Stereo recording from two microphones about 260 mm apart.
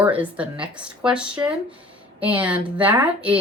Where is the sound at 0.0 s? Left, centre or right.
Centre.